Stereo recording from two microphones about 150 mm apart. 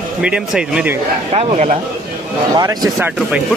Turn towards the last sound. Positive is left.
turn(degrees=-10)  # may be behind; listen again after turning